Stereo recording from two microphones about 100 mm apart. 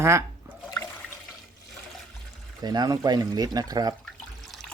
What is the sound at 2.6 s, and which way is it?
Speech, 40° right (ahead or behind).